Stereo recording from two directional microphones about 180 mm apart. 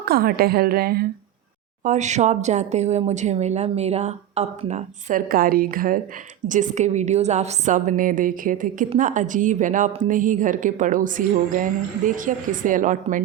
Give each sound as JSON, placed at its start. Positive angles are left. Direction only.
{"t": 0.0, "sound": "a woman's voice", "side_deg": -55}
{"t": 1.8, "sound": "a woman's voice", "side_deg": -40}